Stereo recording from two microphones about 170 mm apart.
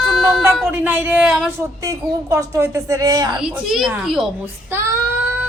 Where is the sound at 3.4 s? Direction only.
5° right (ahead or behind).